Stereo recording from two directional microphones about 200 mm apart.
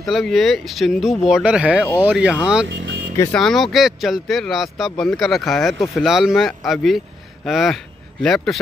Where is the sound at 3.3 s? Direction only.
Centre (ahead or behind).